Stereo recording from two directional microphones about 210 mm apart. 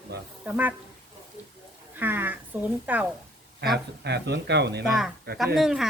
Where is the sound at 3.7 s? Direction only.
55° right (ahead or behind).